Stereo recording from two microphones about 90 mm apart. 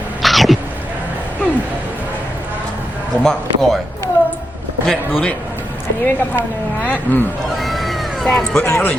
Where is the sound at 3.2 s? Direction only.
5° left (ahead or behind).